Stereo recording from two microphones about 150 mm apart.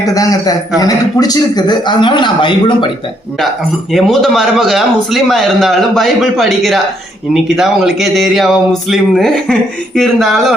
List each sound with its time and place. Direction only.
0.0 s a man's voice: 25° left (ahead or behind)
3.9 s speech: centre (ahead or behind)